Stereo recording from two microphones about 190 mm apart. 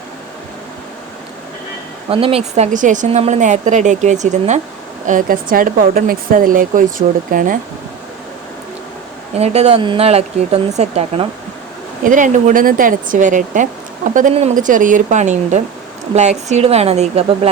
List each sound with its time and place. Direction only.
2.0 s a woman's voice: 30° right (ahead or behind); by 7.6 s 45° right (ahead or behind)
9.4 s a woman's voice: 35° right (ahead or behind)